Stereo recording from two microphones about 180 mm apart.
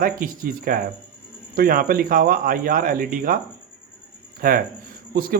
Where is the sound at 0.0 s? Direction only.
50° right (ahead or behind).